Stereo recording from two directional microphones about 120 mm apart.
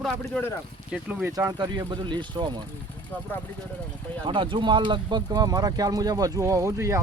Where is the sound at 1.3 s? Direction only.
35° right (ahead or behind).